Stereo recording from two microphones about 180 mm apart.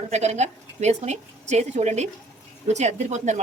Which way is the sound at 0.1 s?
40° right (ahead or behind).